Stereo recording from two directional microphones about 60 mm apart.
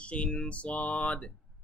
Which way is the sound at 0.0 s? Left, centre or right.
Centre.